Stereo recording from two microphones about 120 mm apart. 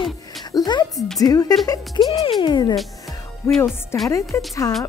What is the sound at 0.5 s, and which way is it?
Speech, 35° left (ahead or behind).